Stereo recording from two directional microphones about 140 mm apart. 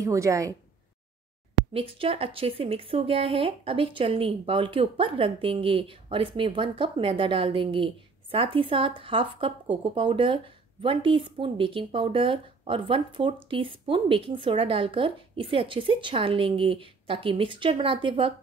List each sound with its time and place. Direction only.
0.0 s a woman's voice: 20° right (ahead or behind)
1.7 s speech: 40° right (ahead or behind)